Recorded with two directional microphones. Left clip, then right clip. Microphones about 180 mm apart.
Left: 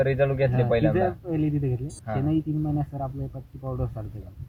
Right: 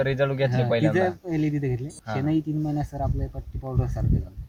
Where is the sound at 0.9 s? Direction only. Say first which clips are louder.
Right 1 dB; 5° right (ahead or behind).